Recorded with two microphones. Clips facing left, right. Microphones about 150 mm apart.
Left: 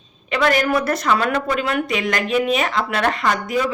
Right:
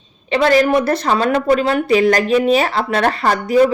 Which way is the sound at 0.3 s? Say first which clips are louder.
Right 5 dB; 30° right (ahead or behind).